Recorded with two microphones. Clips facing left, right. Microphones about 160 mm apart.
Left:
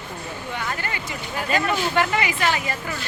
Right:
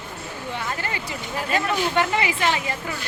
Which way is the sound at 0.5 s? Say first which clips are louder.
Even; 30° right (ahead or behind).